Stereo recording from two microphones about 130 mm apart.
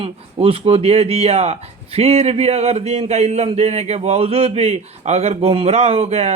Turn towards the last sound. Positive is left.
turn(degrees=-55)  # may be behind; listen again after turning